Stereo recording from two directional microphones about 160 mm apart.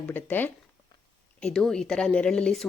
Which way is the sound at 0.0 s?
10° left (ahead or behind).